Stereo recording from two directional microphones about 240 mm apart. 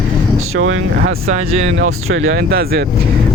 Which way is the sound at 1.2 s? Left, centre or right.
Right.